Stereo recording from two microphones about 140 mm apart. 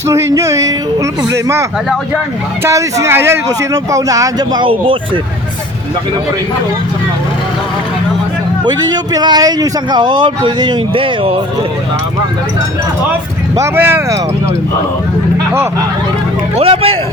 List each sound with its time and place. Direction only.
0.1 s speech: 20° right (ahead or behind)
2.6 s speech: 20° right (ahead or behind); by 5.2 s 40° right (ahead or behind)
8.6 s speech: 30° right (ahead or behind)
13.6 s speech: 15° right (ahead or behind)
16.6 s speech: 45° right (ahead or behind)